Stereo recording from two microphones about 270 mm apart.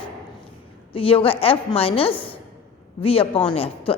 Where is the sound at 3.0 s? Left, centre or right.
Left.